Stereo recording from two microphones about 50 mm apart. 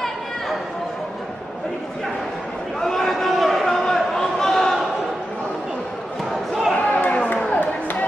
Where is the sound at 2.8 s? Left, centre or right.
Centre.